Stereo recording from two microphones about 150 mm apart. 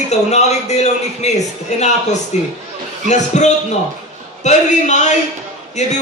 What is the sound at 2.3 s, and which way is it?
A man's voice, 50° left (ahead or behind).